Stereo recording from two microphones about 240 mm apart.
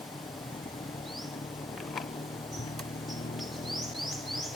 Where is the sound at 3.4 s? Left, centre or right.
Centre.